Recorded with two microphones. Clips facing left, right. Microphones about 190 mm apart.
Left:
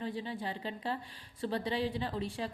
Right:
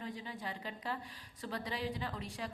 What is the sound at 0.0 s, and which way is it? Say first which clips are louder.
A woman's voice: left 6 dB; 30° left (ahead or behind).